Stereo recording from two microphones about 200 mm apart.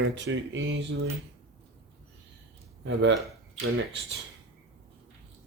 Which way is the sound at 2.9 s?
70° right (ahead or behind).